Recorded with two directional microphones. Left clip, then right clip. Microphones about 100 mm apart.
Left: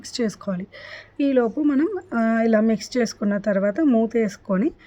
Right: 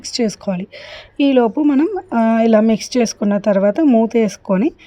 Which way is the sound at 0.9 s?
40° right (ahead or behind).